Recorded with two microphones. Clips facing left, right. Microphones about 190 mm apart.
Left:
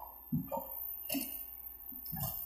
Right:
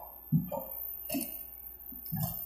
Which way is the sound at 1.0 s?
60° right (ahead or behind).